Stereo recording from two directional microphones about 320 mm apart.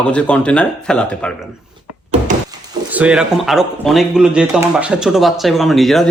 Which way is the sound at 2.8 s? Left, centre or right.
Centre.